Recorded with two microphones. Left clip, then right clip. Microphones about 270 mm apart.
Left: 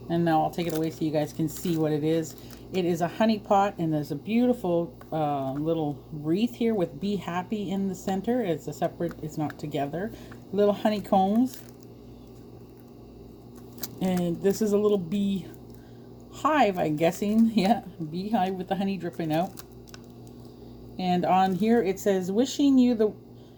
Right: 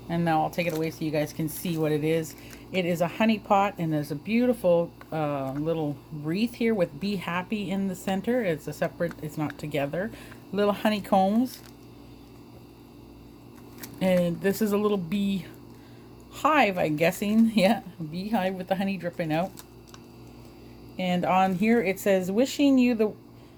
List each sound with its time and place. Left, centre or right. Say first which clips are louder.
0.1 s speech: left 1 dB; right
14.0 s speech: right 3 dB; right
20.9 s speech: left 1 dB; right